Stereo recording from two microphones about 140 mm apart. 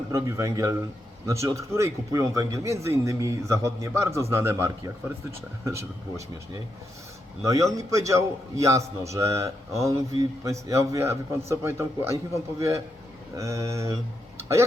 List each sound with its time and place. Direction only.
0.1 s speech: 20° right (ahead or behind)